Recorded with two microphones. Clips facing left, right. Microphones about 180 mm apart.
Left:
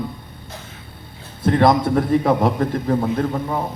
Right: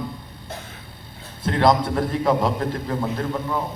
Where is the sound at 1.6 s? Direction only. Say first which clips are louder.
Left 1 dB; 55° left (ahead or behind).